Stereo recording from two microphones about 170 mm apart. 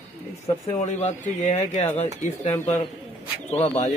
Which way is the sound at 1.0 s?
45° left (ahead or behind).